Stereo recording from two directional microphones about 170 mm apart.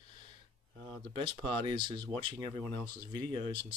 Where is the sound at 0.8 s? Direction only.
30° right (ahead or behind).